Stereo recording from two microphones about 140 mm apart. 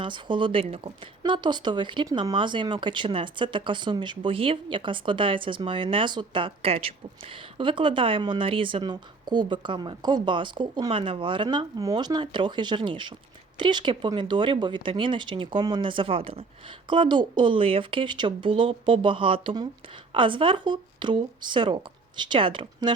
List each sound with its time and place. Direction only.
0.0 s speech: 35° right (ahead or behind)
11.4 s speech: 25° right (ahead or behind)